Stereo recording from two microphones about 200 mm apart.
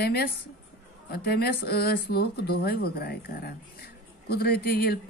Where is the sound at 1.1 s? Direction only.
50° left (ahead or behind).